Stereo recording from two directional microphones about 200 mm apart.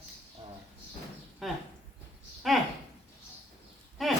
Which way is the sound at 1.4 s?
Centre (ahead or behind).